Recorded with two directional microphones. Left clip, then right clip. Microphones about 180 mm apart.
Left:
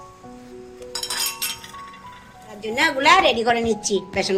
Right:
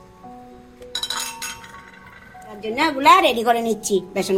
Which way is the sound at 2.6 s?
45° right (ahead or behind).